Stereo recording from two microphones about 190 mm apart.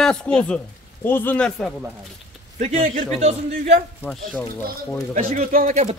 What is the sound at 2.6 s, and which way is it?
Speech, 35° right (ahead or behind).